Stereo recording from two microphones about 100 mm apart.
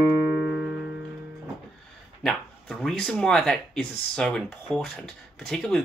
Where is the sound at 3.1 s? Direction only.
Centre (ahead or behind).